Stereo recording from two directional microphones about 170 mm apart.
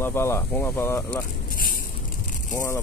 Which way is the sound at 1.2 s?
55° left (ahead or behind).